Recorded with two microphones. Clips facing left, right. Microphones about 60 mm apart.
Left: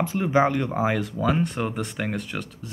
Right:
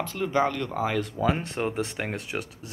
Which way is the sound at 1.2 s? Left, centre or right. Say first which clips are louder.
Left 2 dB; centre.